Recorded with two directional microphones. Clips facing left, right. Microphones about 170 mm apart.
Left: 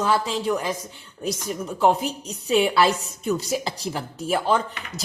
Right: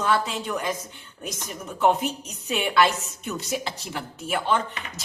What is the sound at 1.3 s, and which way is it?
A woman's voice, 35° left (ahead or behind).